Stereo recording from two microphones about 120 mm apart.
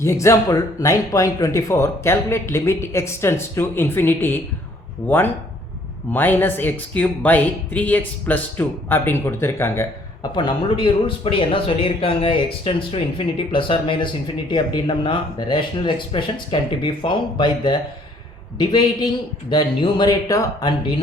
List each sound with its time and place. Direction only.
0.0 s speech: 25° left (ahead or behind)
10.3 s speech: 40° left (ahead or behind)